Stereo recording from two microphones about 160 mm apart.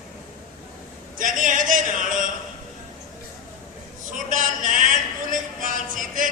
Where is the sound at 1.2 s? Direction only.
55° right (ahead or behind).